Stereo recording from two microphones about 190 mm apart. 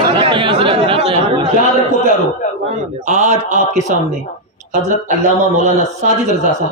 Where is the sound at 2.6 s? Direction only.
40° right (ahead or behind).